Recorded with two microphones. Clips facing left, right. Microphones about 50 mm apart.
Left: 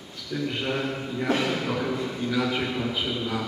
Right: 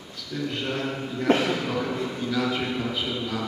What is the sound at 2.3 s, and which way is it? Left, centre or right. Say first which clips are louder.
A man's voice: even; centre.